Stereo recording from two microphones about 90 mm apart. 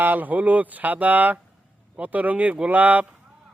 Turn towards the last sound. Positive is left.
turn(degrees=-20)  # may be behind; listen again after turning